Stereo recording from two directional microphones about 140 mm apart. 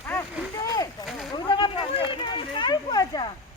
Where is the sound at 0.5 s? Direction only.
25° left (ahead or behind).